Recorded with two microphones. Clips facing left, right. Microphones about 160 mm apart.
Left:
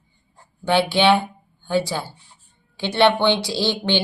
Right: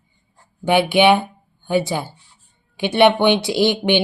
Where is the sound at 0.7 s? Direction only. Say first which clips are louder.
Right 3 dB; 15° right (ahead or behind).